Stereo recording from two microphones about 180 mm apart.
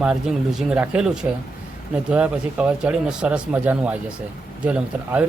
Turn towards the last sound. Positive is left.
turn(degrees=-5)  # may be behind; listen again after turning